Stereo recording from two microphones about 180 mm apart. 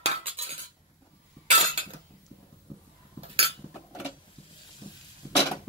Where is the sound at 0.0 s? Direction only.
35° right (ahead or behind).